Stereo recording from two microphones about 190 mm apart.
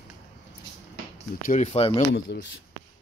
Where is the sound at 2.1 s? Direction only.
60° left (ahead or behind).